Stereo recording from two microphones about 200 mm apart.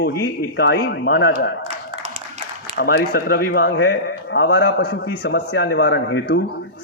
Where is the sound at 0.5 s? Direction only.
60° left (ahead or behind).